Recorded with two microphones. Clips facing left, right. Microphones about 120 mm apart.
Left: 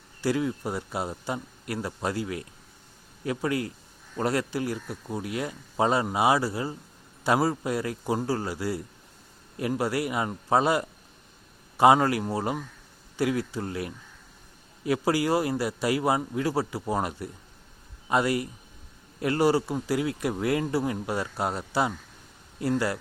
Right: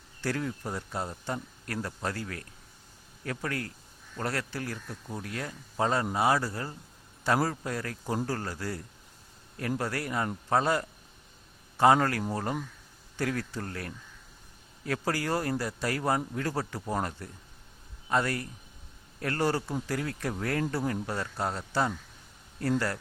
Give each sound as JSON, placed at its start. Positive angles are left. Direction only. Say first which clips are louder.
{"t": 0.2, "sound": "speech", "louder": "left 6 dB", "side_deg": 10}